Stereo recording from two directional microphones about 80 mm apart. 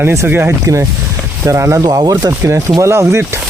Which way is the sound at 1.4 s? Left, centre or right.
Right.